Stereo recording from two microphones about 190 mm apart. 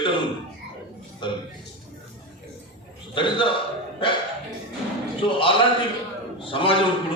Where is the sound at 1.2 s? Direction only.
25° left (ahead or behind).